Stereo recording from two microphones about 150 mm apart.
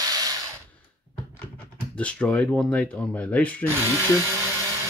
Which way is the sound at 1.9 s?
10° left (ahead or behind).